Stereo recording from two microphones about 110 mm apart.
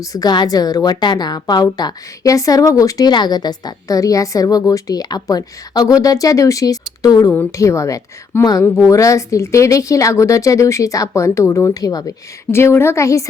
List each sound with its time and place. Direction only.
0.0 s a woman's voice: 35° left (ahead or behind)